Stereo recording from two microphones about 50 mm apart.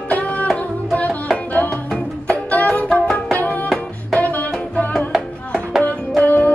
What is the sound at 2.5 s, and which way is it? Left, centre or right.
Music, left.